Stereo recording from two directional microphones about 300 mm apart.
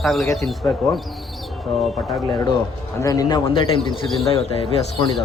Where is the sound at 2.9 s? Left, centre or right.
Centre.